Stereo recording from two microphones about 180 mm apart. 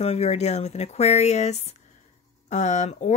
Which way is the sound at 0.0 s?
35° left (ahead or behind).